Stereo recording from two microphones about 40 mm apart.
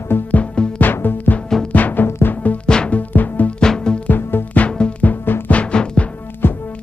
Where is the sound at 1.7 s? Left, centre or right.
Left.